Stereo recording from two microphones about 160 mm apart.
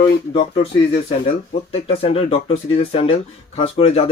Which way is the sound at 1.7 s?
35° left (ahead or behind).